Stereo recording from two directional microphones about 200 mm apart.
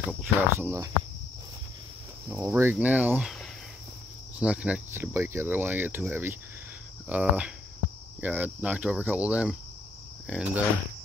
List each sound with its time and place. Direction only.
0.2 s speech: 10° right (ahead or behind)
2.2 s speech: 10° right (ahead or behind)